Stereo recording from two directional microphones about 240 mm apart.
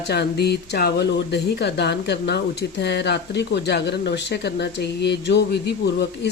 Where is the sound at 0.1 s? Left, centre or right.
Left.